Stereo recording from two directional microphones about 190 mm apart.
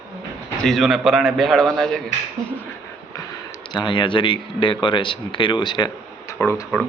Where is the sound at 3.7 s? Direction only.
25° left (ahead or behind).